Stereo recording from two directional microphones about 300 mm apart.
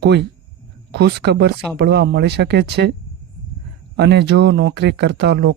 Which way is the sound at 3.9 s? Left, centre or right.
Right.